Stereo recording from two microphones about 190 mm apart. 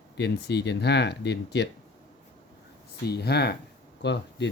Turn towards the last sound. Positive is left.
turn(degrees=65)  # may be behind; listen again after turning